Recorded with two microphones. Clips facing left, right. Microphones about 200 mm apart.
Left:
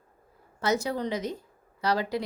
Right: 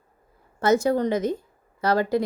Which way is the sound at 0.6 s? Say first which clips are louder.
Right 7 dB; 50° right (ahead or behind).